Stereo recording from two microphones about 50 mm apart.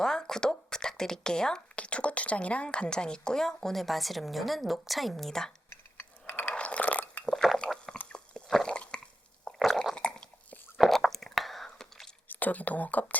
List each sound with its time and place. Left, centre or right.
0.0 s speech: centre
1.7 s a woman's voice: left; by 5.5 s centre
6.2 s a sound: left
6.5 s a sound: left
7.4 s squish: centre
8.1 s chewing: centre
9.4 s stomach rumble: centre
10.8 s a sound: centre
12.3 s speech: left